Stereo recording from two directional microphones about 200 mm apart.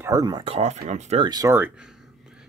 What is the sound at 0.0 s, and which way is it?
Speech, 20° right (ahead or behind).